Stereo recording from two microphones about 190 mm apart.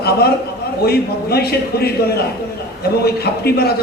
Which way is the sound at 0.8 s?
55° left (ahead or behind).